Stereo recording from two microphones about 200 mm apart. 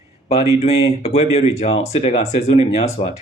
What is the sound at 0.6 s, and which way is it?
Speech, 30° left (ahead or behind).